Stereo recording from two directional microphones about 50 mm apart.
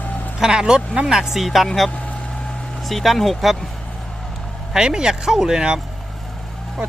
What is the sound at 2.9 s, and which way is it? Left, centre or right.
Speech, centre.